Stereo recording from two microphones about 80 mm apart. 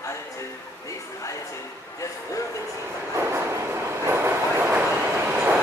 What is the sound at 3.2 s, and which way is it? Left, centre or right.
Train, right.